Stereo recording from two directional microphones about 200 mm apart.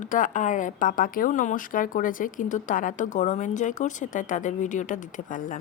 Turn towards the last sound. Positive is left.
turn(degrees=40)  # may be behind; listen again after turning